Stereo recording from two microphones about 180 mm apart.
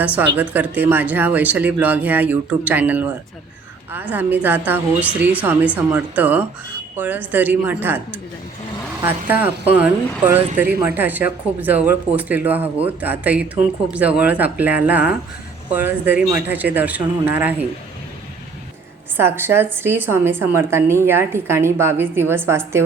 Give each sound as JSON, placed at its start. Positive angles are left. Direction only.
{"t": 0.0, "sound": "a woman's voice", "side_deg": -10}
{"t": 19.1, "sound": "a woman's voice", "side_deg": -10}